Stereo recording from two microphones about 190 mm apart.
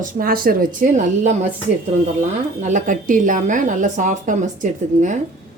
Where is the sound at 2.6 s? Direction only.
40° right (ahead or behind).